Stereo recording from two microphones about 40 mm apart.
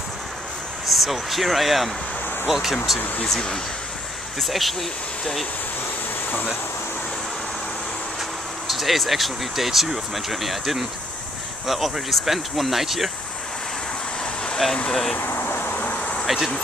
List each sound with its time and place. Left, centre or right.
0.8 s speech: centre
3.3 s speech: centre
4.4 s speech: centre
8.6 s speech: centre
14.9 s speech: centre
15.1 s a sound: left
15.8 s insect: left
16.3 s speech: centre